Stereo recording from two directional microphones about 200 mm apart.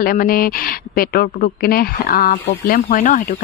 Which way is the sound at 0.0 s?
45° left (ahead or behind).